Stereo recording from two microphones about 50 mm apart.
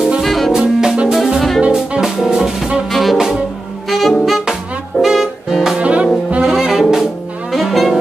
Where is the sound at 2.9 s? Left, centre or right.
Centre.